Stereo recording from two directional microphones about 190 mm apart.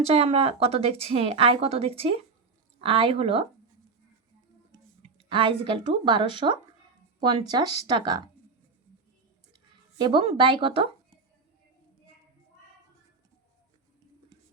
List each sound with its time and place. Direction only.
0.0 s speech: 30° right (ahead or behind)
4.7 s speech: 25° right (ahead or behind)
10.0 s speech: 25° right (ahead or behind)